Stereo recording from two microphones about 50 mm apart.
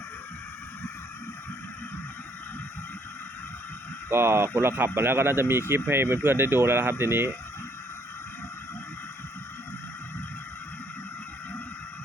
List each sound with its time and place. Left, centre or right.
4.1 s speech: right